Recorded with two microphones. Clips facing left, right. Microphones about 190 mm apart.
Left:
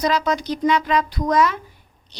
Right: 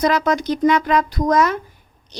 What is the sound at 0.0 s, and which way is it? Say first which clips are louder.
A woman's voice: right 3 dB; 50° right (ahead or behind).